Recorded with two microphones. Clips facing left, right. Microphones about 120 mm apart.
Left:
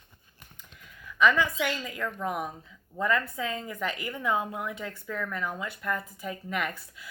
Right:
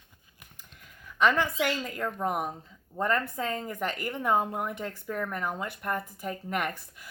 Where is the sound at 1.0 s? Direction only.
50° right (ahead or behind).